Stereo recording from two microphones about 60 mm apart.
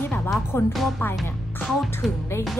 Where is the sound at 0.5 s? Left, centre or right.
Left.